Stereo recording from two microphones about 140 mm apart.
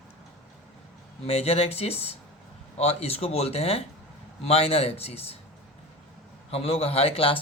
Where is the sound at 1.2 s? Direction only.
45° left (ahead or behind).